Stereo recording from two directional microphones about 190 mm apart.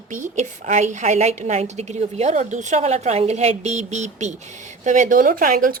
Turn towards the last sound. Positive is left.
turn(degrees=-45)  # may be behind; listen again after turning